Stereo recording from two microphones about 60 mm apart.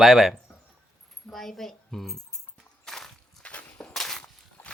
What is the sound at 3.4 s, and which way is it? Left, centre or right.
Walk, left.